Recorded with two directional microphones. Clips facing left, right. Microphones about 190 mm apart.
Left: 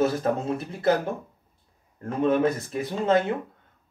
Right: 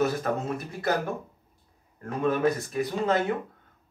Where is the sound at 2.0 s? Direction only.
25° left (ahead or behind).